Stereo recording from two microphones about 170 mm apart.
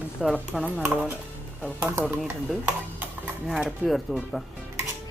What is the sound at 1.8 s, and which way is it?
Speech, 15° right (ahead or behind).